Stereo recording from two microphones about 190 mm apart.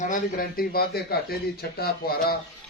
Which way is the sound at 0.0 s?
45° left (ahead or behind).